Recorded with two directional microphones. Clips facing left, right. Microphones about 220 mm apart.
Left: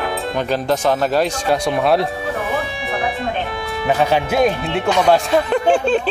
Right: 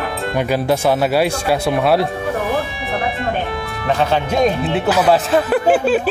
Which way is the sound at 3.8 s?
10° left (ahead or behind).